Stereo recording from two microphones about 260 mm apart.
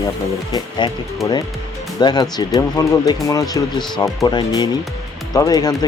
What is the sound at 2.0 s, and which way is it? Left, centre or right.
Speech, centre.